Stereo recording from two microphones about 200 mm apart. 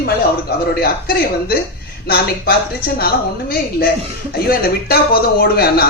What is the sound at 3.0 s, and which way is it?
Speech, 50° left (ahead or behind).